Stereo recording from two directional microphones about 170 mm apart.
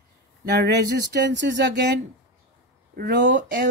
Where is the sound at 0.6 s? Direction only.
80° right.